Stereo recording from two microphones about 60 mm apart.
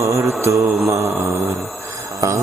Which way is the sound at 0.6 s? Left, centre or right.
Right.